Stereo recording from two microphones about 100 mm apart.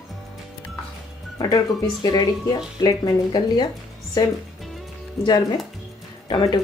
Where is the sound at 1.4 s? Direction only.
40° left (ahead or behind).